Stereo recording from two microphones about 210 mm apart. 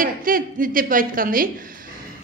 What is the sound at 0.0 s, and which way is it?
A woman's voice, 40° right (ahead or behind).